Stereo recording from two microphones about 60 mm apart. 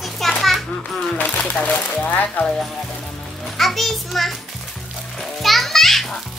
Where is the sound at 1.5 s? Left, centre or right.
Left.